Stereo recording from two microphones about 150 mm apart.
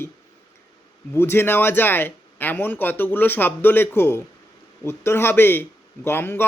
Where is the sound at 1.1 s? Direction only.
15° left (ahead or behind).